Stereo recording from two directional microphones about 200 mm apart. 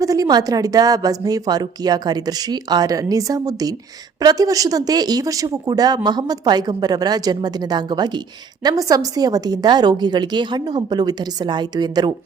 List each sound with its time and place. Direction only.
0.0 s speech: 15° right (ahead or behind)